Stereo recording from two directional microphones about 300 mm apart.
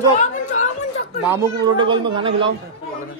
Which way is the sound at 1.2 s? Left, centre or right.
Centre.